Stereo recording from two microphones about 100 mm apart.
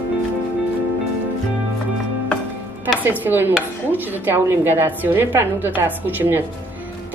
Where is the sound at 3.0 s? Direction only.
20° right (ahead or behind).